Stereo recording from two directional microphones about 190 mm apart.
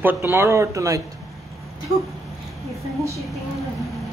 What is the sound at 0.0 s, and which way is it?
Speech, 10° right (ahead or behind).